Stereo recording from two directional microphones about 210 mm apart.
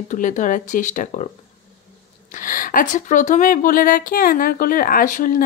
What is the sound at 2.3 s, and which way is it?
Speech, 40° left (ahead or behind).